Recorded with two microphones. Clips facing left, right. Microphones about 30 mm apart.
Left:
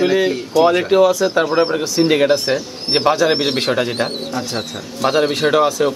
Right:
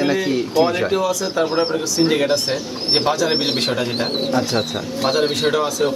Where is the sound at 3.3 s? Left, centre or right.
Centre.